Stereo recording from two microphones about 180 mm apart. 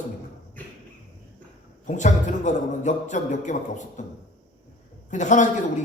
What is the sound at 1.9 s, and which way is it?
A man's voice, 45° left (ahead or behind).